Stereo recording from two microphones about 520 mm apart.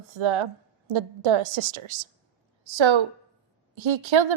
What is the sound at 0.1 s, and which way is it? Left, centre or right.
A woman's voice, right.